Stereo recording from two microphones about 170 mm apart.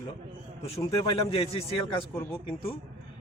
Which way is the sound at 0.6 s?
35° left (ahead or behind).